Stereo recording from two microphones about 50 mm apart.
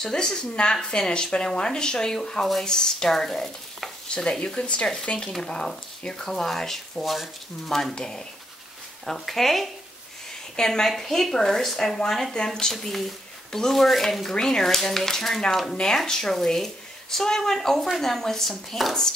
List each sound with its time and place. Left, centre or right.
0.0 s a woman's voice: centre
4.1 s a woman's voice: centre
9.0 s a woman's voice: centre